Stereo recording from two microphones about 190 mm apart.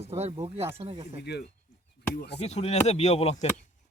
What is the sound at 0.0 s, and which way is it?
Speech, 30° right (ahead or behind).